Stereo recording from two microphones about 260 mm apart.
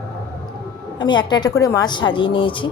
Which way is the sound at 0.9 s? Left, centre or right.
Centre.